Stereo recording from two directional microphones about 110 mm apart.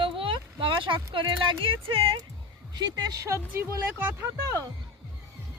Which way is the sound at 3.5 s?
20° right (ahead or behind).